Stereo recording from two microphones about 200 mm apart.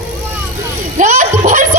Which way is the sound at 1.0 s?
40° right (ahead or behind).